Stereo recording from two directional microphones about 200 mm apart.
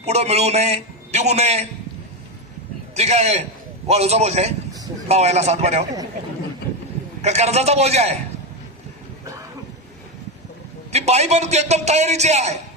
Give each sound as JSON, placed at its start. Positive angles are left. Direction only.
{"t": 0.0, "sound": "a man's voice", "side_deg": -30}
{"t": 3.0, "sound": "a man's voice", "side_deg": -35}
{"t": 7.2, "sound": "a man's voice", "side_deg": -35}
{"t": 10.9, "sound": "a man's voice", "side_deg": -35}